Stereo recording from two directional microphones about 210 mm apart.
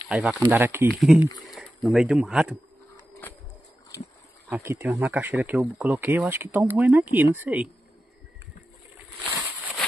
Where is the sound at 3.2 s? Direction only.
10° left (ahead or behind).